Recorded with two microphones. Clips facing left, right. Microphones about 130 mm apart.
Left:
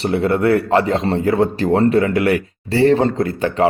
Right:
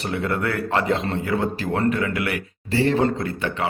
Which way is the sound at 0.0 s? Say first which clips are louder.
Left 8 dB; 30° left (ahead or behind).